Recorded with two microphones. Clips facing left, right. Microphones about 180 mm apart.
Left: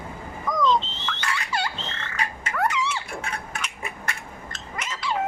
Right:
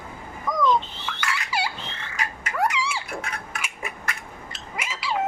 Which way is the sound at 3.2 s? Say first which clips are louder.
Left 1 dB; 30° left (ahead or behind).